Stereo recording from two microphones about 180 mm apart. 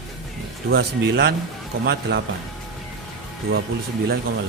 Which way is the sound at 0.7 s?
70° right (ahead or behind).